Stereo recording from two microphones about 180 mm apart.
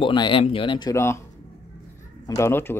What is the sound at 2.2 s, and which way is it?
Speech, 15° left (ahead or behind).